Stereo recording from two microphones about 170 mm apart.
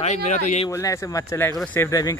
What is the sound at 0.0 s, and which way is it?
Speech, 40° left (ahead or behind).